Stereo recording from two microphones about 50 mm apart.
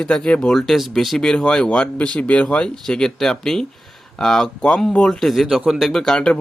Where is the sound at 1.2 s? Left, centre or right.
Centre.